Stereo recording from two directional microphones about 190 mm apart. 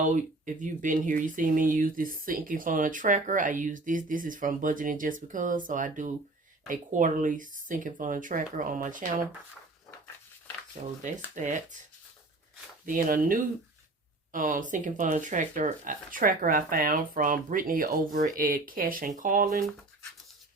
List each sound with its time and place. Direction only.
0.0 s speech: 45° right (ahead or behind)
10.8 s speech: 35° right (ahead or behind)
12.8 s speech: 45° right (ahead or behind)